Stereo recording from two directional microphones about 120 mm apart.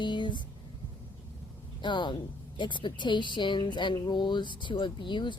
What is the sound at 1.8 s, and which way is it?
Speech, 40° left (ahead or behind).